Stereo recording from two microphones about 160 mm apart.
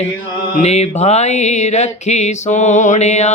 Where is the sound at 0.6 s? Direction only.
45° left (ahead or behind).